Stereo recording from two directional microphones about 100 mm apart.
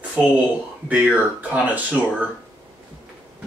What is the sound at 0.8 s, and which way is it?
Speech, 15° right (ahead or behind).